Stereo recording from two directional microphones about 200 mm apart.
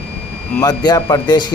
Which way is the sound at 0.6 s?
20° left (ahead or behind).